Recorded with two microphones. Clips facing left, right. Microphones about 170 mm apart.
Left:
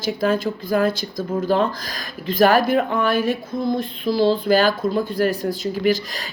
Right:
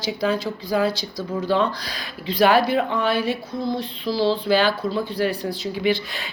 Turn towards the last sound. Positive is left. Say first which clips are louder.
# left 2 dB
turn(degrees=40)  # may be behind; listen again after turning